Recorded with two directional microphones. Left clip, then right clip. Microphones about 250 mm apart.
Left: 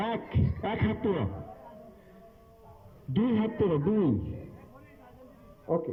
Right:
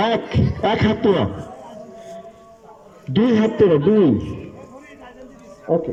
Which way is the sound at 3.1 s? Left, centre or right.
Right.